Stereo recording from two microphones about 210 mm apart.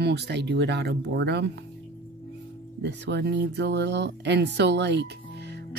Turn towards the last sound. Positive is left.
turn(degrees=-55)  # may be behind; listen again after turning